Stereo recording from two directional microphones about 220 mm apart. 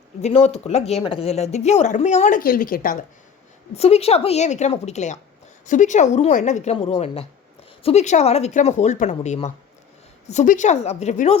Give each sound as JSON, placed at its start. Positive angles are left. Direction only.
{"t": 0.2, "sound": "speech", "side_deg": 30}
{"t": 3.8, "sound": "a woman's voice", "side_deg": 30}